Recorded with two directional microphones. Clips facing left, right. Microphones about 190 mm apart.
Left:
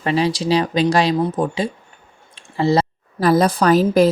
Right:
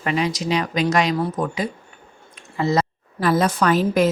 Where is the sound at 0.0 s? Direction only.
30° left (ahead or behind).